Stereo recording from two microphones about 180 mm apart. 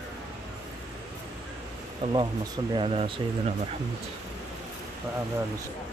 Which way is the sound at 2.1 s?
25° right (ahead or behind).